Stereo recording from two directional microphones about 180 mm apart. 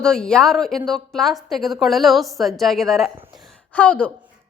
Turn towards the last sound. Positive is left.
turn(degrees=10)  # may be behind; listen again after turning